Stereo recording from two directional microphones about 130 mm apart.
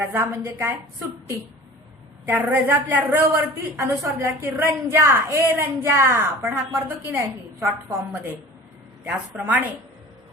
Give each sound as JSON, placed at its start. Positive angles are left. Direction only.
{"t": 0.0, "sound": "a woman's voice", "side_deg": -15}
{"t": 2.2, "sound": "a woman's voice", "side_deg": -15}
{"t": 9.0, "sound": "a woman's voice", "side_deg": -10}